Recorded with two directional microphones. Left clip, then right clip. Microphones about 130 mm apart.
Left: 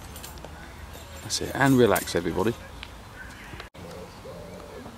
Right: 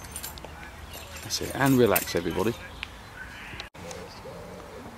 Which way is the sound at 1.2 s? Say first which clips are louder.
Left 2 dB; 10° left (ahead or behind).